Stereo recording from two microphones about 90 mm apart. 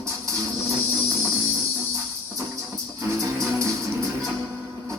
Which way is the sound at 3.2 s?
40° right (ahead or behind).